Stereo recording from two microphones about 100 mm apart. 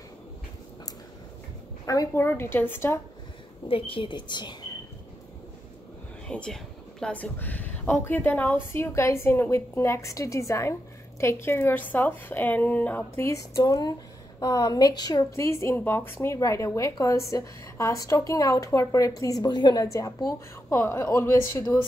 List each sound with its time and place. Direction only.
1.9 s speech: 30° left (ahead or behind)
3.6 s a woman's voice: 65° left (ahead or behind)
6.2 s speech: 10° left (ahead or behind)
13.4 s a woman's voice: 35° left (ahead or behind)